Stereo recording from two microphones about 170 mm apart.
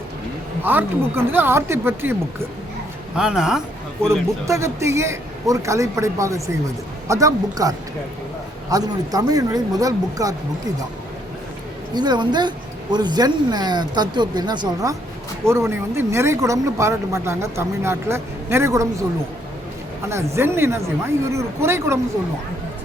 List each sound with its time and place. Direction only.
0.6 s speech: 10° right (ahead or behind)
3.2 s speech: 5° right (ahead or behind)
4.4 s speech: 15° right (ahead or behind)
8.7 s speech: 20° right (ahead or behind)
11.9 s speech: 25° right (ahead or behind)
20.1 s speech: 15° right (ahead or behind)